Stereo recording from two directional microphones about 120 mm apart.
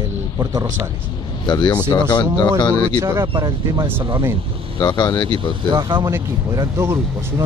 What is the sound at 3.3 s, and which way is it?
Speech, 40° right (ahead or behind).